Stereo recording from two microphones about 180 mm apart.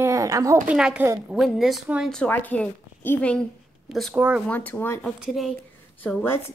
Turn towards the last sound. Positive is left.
turn(degrees=10)  # may be behind; listen again after turning